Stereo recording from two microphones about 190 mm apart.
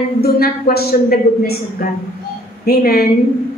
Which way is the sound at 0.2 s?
55° left (ahead or behind).